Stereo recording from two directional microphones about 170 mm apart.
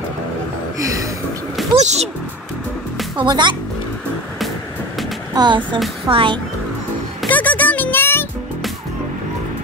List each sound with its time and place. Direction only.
0.7 s gasp: 20° right (ahead or behind)
1.8 s speech: 40° right (ahead or behind)
3.2 s speech: 25° right (ahead or behind)
5.3 s speech: 25° right (ahead or behind)
7.2 s music: 10° left (ahead or behind)